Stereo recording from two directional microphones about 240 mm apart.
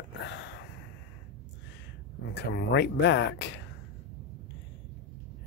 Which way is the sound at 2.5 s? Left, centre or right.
Left.